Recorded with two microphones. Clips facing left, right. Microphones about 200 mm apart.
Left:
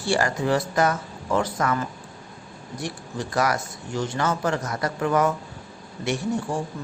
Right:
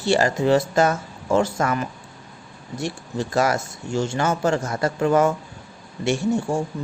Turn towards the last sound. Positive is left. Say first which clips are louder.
# right 4 dB
turn(degrees=-25)  # may be behind; listen again after turning